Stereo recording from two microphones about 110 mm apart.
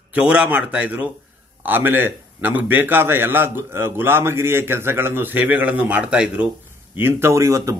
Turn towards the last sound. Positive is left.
turn(degrees=-30)  # may be behind; listen again after turning